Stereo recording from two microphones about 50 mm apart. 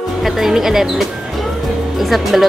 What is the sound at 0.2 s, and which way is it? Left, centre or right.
Speech, centre.